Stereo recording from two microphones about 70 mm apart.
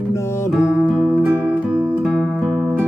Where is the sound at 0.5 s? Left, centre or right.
Centre.